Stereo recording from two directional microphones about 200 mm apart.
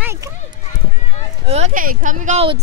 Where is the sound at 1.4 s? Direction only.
30° right (ahead or behind).